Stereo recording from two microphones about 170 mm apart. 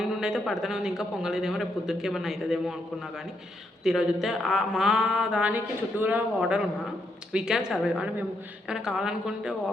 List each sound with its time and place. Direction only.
0.0 s speech: 5° right (ahead or behind)
3.8 s speech: centre (ahead or behind)